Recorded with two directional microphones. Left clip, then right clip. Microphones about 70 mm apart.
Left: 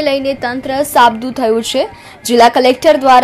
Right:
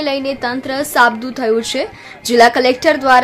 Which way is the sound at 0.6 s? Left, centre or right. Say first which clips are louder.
Left 3 dB; left.